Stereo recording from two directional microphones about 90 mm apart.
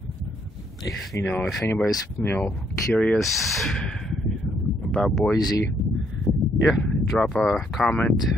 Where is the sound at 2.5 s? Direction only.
10° left (ahead or behind).